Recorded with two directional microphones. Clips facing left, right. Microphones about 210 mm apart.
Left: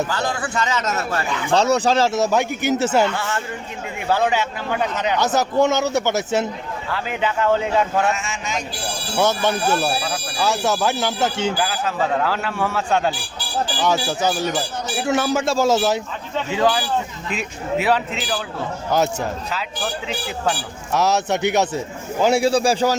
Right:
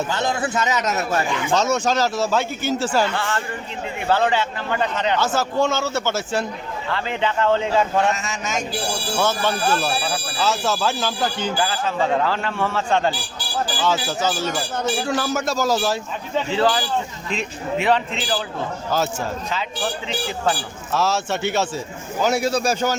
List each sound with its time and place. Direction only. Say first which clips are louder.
0.1 s a man's voice: right 1 dB; 20° right (ahead or behind)
1.5 s a man's voice: left 4 dB; 35° left (ahead or behind); by 8.1 s 5° left (ahead or behind)
8.1 s a man's voice: even; 40° right (ahead or behind)
9.2 s a man's voice: left 3 dB; 20° left (ahead or behind)
11.5 s a man's voice: even; 5° left (ahead or behind); by 16.0 s 20° left (ahead or behind)
16.5 s a man's voice: left 2 dB; 10° left (ahead or behind)
18.9 s a man's voice: left 3 dB; 20° left (ahead or behind)
20.9 s a man's voice: left 3 dB; 20° left (ahead or behind)
22.2 s a man's voice: left 3 dB; 30° left (ahead or behind)